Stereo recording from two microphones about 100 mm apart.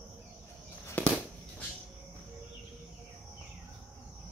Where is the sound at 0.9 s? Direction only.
15° left (ahead or behind).